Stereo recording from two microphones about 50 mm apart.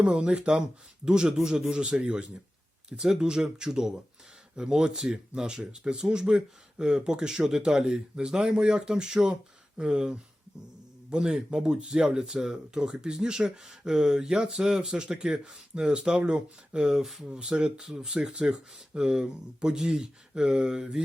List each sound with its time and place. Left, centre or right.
0.1 s speech: right